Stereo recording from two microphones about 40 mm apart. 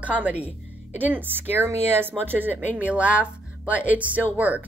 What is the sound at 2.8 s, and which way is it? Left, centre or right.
Speech, right.